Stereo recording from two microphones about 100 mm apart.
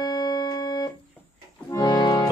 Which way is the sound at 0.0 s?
40° left (ahead or behind).